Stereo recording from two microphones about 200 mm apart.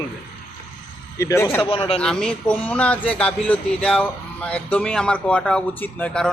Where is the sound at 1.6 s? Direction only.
25° left (ahead or behind).